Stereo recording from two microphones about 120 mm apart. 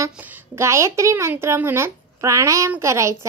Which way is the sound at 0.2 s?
20° right (ahead or behind).